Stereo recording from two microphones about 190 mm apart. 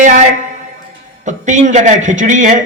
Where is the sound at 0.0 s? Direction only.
40° right (ahead or behind).